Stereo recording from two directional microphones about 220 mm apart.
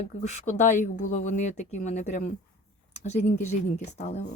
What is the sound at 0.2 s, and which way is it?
Speech, 30° left (ahead or behind).